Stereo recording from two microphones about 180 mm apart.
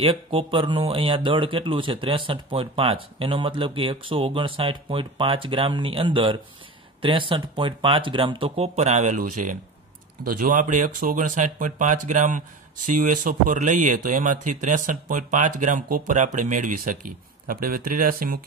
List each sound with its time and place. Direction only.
0.0 s speech: 30° right (ahead or behind); by 18.4 s 50° right (ahead or behind)